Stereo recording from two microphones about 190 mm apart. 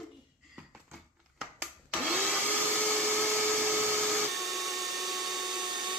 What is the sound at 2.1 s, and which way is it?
Vacuum cleaner, centre (ahead or behind).